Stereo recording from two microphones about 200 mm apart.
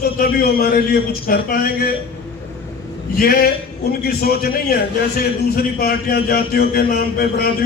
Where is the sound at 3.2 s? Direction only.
50° left (ahead or behind).